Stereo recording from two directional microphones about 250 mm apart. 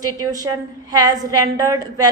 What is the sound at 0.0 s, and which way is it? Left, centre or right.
A woman's voice, centre.